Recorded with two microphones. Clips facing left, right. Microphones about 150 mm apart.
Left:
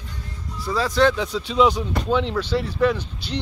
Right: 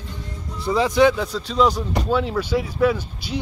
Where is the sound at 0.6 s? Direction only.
20° right (ahead or behind).